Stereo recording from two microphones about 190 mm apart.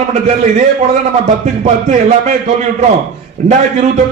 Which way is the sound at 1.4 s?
40° right (ahead or behind).